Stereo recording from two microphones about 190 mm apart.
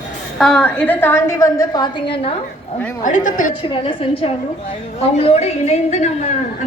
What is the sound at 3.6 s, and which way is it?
A woman's voice, 25° left (ahead or behind).